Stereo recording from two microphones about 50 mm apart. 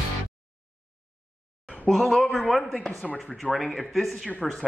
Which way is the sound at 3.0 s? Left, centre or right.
Left.